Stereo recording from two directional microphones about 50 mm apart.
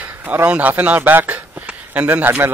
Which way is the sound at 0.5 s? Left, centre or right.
Right.